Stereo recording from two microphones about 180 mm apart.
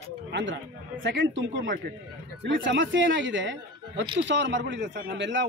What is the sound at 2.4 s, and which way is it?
Speech, 85° right.